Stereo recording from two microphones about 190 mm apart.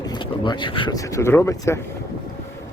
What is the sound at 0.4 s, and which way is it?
Speech, 25° left (ahead or behind).